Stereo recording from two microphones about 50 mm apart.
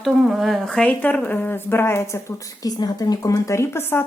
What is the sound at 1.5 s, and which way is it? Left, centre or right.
Speech, left.